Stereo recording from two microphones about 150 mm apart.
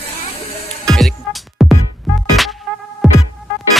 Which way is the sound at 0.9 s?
Centre (ahead or behind).